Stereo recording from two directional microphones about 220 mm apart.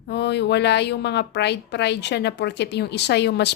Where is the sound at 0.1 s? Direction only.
50° left (ahead or behind).